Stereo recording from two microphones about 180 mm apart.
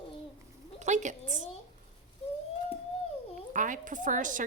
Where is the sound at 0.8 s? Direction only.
40° right (ahead or behind).